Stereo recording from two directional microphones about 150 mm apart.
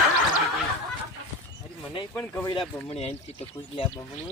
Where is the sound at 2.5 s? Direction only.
40° left (ahead or behind).